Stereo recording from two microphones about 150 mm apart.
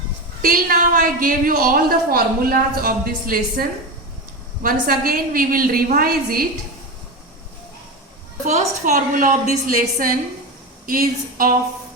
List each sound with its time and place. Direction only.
0.4 s a woman's voice: 70° right (ahead or behind)
8.4 s a woman's voice: 50° right (ahead or behind); by 11.5 s 70° right (ahead or behind)